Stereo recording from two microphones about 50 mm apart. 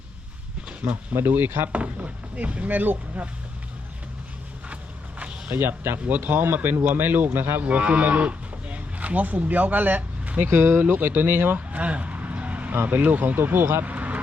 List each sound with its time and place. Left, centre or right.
1.1 s speech: right
1.7 s speech: right
4.7 s a sound: right
5.5 s speech: right
6.1 s speech: right
7.6 s speech: right
10.4 s speech: right
11.5 s a sound: right
12.7 s speech: right
13.8 s vehicle: right